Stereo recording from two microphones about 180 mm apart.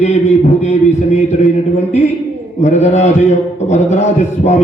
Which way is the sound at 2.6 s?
40° left (ahead or behind).